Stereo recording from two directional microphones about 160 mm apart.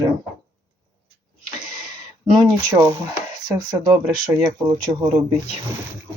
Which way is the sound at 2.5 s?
20° right (ahead or behind).